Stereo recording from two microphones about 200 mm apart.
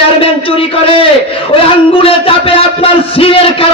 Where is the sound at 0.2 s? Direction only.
30° left (ahead or behind).